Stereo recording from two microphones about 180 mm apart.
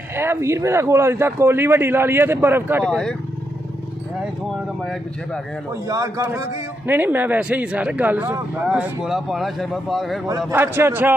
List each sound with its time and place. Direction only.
0.1 s speech: 15° right (ahead or behind)
2.9 s speech: 5° left (ahead or behind)
5.9 s speech: 15° right (ahead or behind); by 10.2 s centre (ahead or behind)
10.5 s speech: 15° right (ahead or behind)